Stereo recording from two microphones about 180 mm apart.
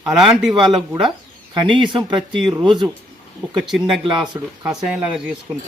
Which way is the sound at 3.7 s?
Centre (ahead or behind).